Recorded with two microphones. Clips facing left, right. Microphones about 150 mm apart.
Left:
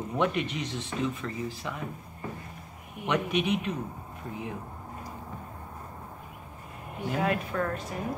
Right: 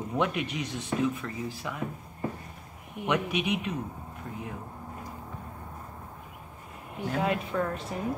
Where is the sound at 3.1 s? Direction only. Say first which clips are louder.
Left 1 dB; 10° right (ahead or behind).